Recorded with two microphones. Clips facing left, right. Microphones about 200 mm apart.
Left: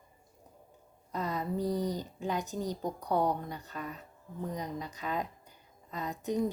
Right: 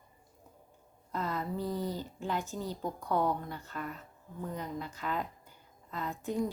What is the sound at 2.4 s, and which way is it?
Speech, 40° left (ahead or behind).